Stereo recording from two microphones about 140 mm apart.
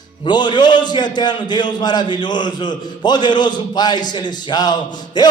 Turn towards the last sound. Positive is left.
turn(degrees=30)  # may be behind; listen again after turning